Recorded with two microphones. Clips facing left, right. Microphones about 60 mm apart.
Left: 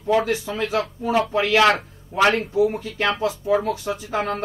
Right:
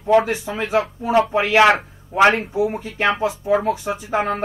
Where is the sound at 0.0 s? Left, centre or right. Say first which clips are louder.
Right 4 dB; right.